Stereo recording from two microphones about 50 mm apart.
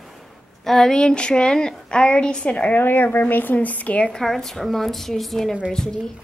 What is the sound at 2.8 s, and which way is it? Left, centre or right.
Speech, left.